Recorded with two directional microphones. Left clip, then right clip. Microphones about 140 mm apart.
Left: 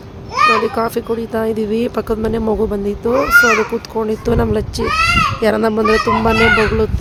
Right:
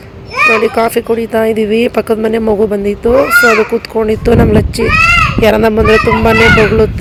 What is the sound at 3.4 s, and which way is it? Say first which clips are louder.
Speech: right 2 dB; 40° right (ahead or behind).